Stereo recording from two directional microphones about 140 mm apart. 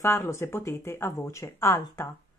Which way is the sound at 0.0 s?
20° left (ahead or behind).